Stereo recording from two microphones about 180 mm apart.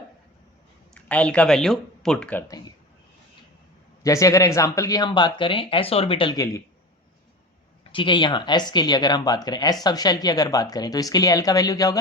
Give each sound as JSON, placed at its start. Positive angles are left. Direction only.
{"t": 1.0, "sound": "speech", "side_deg": 5}
{"t": 4.0, "sound": "speech", "side_deg": 20}
{"t": 7.9, "sound": "speech", "side_deg": 25}